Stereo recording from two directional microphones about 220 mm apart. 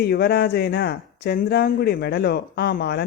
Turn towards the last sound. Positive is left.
turn(degrees=45)  # may be behind; listen again after turning